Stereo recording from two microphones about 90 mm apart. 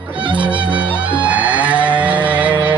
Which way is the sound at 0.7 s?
15° right (ahead or behind).